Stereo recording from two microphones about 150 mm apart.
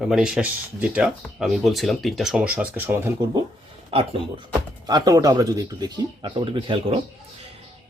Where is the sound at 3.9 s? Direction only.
35° right (ahead or behind).